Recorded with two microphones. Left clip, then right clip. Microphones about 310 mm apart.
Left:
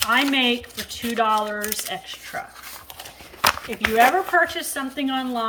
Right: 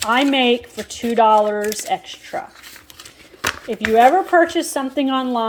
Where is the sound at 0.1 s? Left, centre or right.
Centre.